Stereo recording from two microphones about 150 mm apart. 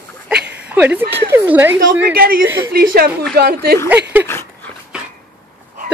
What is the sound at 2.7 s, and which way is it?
A woman's voice, 90° right.